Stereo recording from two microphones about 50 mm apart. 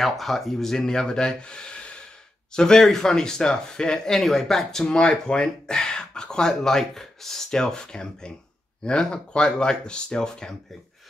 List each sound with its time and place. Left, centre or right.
0.0 s speech: centre